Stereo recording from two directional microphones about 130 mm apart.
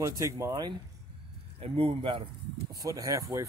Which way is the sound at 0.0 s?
25° right (ahead or behind).